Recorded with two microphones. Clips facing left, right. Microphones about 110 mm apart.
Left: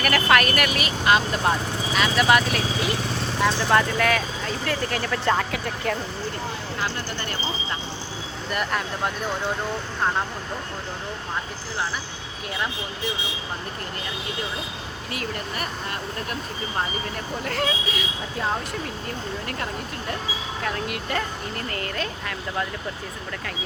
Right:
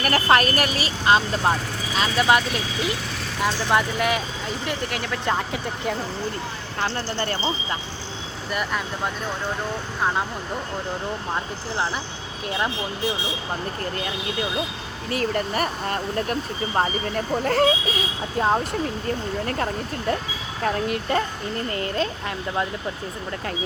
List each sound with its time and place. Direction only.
0.0 s speech: 35° right (ahead or behind); by 4.8 s 15° right (ahead or behind)
4.9 s speech: 5° right (ahead or behind)
15.1 s speech: 40° right (ahead or behind)
20.7 s speech: 35° right (ahead or behind)